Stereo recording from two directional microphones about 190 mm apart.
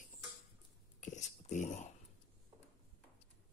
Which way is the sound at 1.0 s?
40° left (ahead or behind).